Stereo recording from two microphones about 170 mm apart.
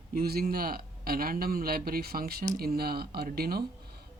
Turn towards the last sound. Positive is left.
turn(degrees=-65)  # may be behind; listen again after turning